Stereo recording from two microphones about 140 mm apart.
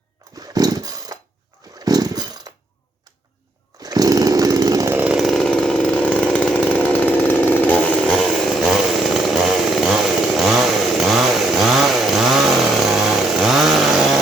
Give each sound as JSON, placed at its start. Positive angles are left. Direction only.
{"t": 0.3, "sound": "chainsaw", "side_deg": -25}
{"t": 3.8, "sound": "chainsaw", "side_deg": -25}
{"t": 5.0, "sound": "chainsaw", "side_deg": 0}